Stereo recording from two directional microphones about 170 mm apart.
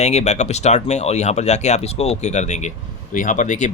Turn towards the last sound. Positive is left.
turn(degrees=45)  # may be behind; listen again after turning